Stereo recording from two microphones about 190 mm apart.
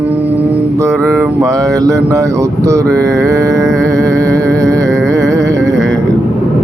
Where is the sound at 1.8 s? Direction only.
15° right (ahead or behind).